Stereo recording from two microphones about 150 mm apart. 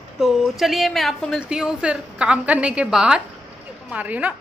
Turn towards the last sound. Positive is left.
turn(degrees=-10)  # may be behind; listen again after turning